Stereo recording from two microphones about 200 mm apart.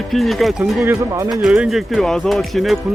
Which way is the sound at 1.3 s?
Centre (ahead or behind).